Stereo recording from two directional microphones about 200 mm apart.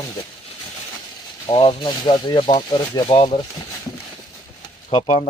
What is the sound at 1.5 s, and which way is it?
Speech, 25° left (ahead or behind).